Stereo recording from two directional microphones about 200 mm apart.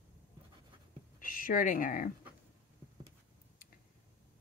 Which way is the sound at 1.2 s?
45° left (ahead or behind).